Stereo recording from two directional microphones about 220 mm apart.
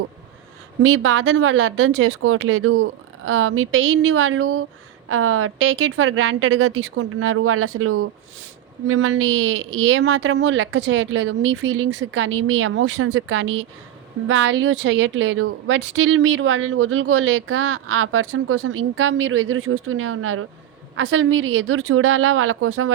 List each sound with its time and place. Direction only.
0.8 s a woman's voice: 60° right (ahead or behind)
8.9 s a woman's voice: 65° right (ahead or behind)